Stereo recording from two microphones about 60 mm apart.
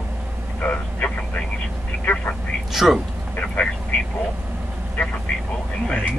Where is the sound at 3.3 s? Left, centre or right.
Left.